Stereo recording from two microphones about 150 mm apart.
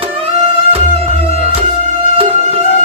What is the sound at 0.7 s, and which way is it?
Music, 40° right (ahead or behind).